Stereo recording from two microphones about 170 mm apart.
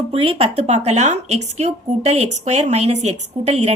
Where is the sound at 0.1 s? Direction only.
35° right (ahead or behind).